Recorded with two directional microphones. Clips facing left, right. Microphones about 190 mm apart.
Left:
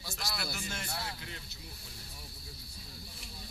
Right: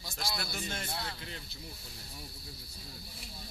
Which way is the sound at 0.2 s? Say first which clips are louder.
Right 2 dB; 30° right (ahead or behind).